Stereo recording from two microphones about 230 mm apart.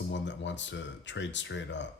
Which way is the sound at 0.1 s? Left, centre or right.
Left.